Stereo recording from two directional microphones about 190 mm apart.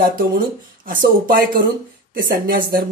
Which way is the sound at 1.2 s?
50° right (ahead or behind).